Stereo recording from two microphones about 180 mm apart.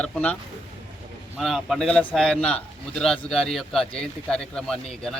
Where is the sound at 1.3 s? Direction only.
Centre (ahead or behind).